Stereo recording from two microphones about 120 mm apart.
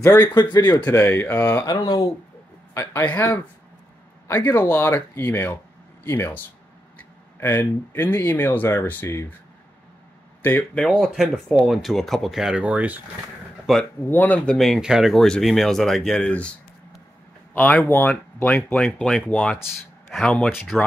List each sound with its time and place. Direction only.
0.2 s speech: 35° left (ahead or behind)
0.8 s speech: 20° left (ahead or behind)
2.7 s speech: 20° left (ahead or behind)
4.5 s speech: 15° left (ahead or behind)
10.4 s speech: 10° left (ahead or behind); by 13.0 s 15° right (ahead or behind)
13.7 s speech: centre (ahead or behind)
14.0 s speech: 15° left (ahead or behind)
17.8 s speech: 15° left (ahead or behind)